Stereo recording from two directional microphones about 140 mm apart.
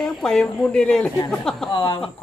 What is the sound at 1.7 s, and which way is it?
Speech, 35° left (ahead or behind).